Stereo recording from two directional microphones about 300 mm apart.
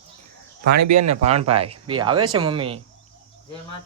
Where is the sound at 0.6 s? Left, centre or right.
Right.